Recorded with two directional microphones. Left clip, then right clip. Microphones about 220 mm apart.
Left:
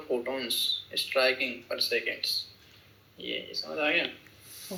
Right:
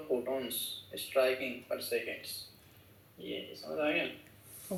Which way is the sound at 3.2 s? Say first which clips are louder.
Left 7 dB; 30° left (ahead or behind).